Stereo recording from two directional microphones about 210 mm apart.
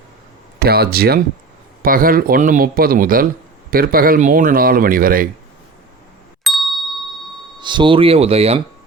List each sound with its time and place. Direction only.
0.6 s speech: 45° right (ahead or behind)
6.4 s ding: centre (ahead or behind)
7.6 s speech: 20° right (ahead or behind)